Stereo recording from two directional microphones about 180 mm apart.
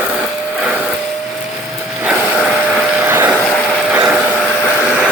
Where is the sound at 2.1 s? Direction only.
5° right (ahead or behind).